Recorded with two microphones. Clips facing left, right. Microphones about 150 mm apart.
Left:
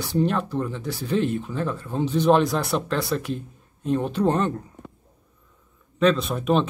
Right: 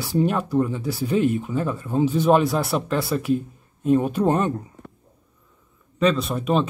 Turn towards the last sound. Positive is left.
turn(degrees=0)  # may be behind; listen again after turning